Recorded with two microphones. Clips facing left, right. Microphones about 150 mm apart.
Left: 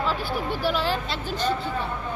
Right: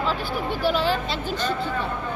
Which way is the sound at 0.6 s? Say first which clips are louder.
Right 3 dB; 5° left (ahead or behind).